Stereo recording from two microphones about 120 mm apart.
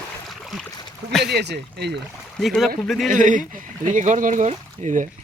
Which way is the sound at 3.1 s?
90° right.